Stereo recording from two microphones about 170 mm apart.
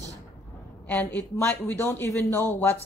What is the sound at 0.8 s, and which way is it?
Speech, 10° left (ahead or behind).